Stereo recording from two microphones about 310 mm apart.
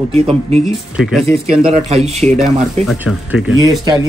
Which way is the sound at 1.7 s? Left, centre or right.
Right.